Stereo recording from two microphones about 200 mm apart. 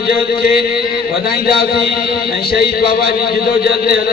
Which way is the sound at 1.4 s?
50° left (ahead or behind).